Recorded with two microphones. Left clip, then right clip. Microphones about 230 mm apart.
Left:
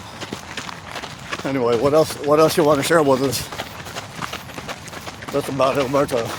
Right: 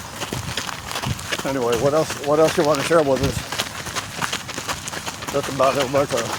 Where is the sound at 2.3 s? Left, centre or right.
Left.